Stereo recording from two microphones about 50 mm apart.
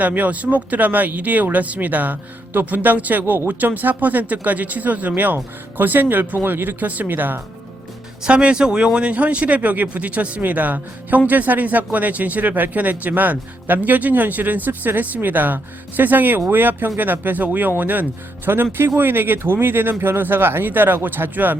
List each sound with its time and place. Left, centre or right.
0.0 s speech: right
8.2 s speech: right